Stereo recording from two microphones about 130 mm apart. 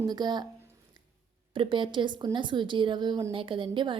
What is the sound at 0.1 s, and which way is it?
Speech, 35° right (ahead or behind).